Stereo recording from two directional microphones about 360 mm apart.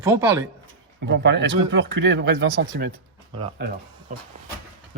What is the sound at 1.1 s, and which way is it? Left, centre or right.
Speech, right.